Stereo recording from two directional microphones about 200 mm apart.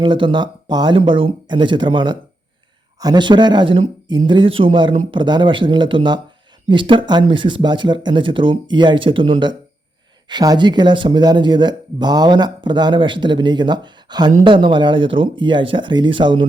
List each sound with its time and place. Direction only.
0.0 s speech: 25° right (ahead or behind)